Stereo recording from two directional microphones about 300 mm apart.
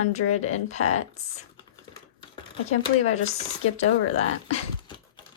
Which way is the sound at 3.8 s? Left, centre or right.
Left.